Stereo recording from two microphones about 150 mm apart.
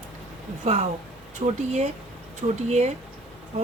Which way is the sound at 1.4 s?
40° right (ahead or behind).